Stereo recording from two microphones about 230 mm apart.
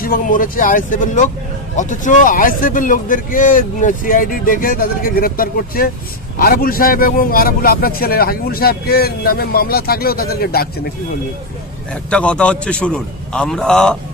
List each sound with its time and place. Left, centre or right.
0.0 s a man's voice: left
11.9 s a man's voice: centre